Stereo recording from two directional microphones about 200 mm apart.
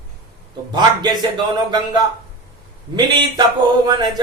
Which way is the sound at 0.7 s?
20° right (ahead or behind).